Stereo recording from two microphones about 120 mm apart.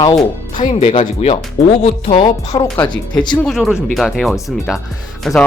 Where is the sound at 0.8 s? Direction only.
50° left (ahead or behind).